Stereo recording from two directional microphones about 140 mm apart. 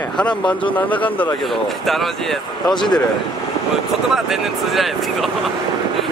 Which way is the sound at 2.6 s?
30° left (ahead or behind).